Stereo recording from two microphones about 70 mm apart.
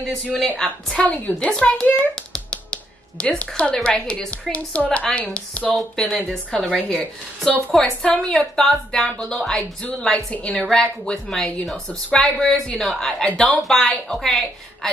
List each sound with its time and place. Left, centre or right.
0.4 s speech: centre
1.0 s speech: centre
2.1 s a sound: centre
4.3 s speech: centre
5.8 s speech: centre